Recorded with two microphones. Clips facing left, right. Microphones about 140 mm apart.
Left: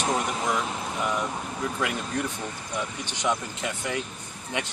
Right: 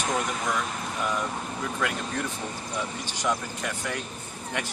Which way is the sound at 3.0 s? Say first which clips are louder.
Left 1 dB; 20° left (ahead or behind).